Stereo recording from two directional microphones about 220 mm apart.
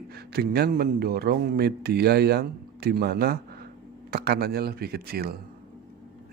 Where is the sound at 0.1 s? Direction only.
45° right (ahead or behind).